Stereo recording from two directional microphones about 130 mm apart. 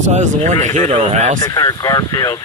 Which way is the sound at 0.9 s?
55° right (ahead or behind).